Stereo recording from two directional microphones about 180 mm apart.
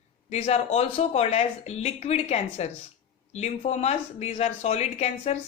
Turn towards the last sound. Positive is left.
turn(degrees=35)  # may be behind; listen again after turning